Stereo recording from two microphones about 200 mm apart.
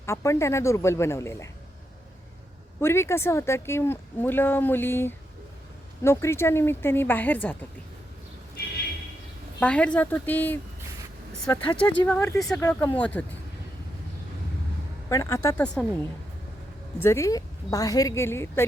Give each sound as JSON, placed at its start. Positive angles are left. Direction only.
{"t": 0.0, "sound": "speech", "side_deg": 15}
{"t": 2.8, "sound": "speech", "side_deg": 15}
{"t": 9.6, "sound": "speech", "side_deg": 5}
{"t": 11.4, "sound": "speech", "side_deg": 20}
{"t": 11.8, "sound": "speech", "side_deg": 5}
{"t": 15.1, "sound": "speech", "side_deg": 15}
{"t": 17.0, "sound": "speech", "side_deg": 15}